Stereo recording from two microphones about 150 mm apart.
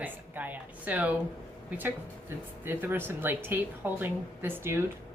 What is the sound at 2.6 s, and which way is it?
A woman's voice, 15° right (ahead or behind).